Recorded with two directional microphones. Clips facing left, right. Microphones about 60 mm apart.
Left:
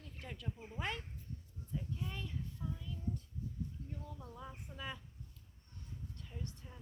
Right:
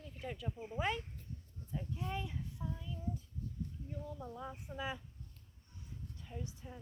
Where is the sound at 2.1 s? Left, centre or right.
Centre.